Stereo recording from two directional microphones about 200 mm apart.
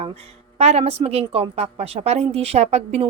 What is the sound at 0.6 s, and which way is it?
A woman's voice, 30° right (ahead or behind).